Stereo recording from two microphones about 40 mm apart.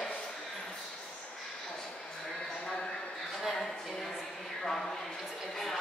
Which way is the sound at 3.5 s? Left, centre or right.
Centre.